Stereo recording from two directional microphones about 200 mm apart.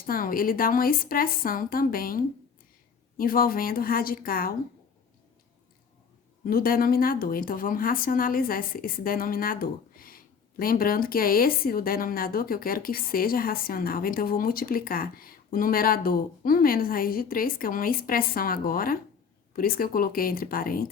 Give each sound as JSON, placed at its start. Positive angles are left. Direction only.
{"t": 0.0, "sound": "speech", "side_deg": 45}
{"t": 6.4, "sound": "speech", "side_deg": 45}